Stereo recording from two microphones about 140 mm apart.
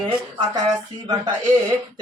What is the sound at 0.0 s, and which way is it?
Speech, 30° right (ahead or behind).